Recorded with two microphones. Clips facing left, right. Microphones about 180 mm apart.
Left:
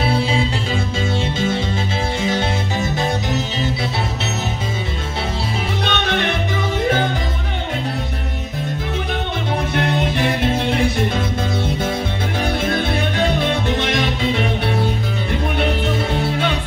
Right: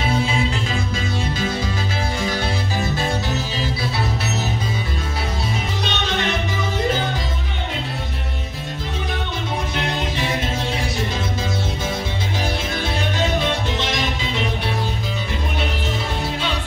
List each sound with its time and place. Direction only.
5.9 s music: 55° left (ahead or behind)
9.8 s music: 60° left (ahead or behind)
12.6 s music: 60° left (ahead or behind)